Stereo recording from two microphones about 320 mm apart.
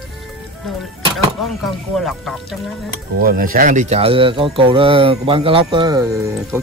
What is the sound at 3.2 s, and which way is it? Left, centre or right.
Speech, right.